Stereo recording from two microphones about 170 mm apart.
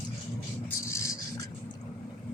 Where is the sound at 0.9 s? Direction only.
15° left (ahead or behind).